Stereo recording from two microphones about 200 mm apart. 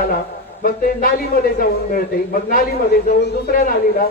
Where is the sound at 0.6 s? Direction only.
45° left (ahead or behind).